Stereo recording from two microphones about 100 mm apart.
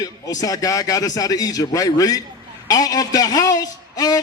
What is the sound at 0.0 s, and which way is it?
A man's voice, 35° left (ahead or behind).